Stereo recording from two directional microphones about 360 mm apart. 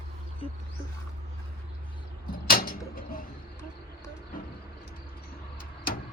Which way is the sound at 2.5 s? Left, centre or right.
Left.